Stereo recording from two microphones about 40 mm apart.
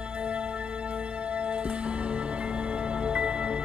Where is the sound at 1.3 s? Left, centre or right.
Right.